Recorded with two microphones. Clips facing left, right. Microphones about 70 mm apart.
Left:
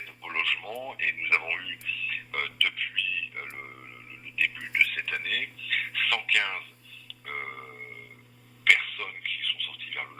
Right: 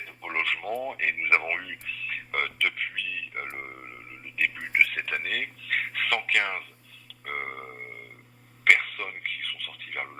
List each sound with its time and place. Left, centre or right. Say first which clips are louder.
0.0 s radio: right 2 dB; right
4.4 s speech: right 2 dB; right
7.1 s burping: right 3 dB; right
8.6 s a sound: right 2 dB; right